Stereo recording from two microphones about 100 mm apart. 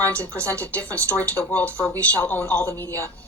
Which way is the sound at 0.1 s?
15° left (ahead or behind).